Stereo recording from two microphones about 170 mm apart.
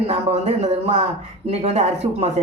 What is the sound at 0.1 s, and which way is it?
Speech, 40° right (ahead or behind).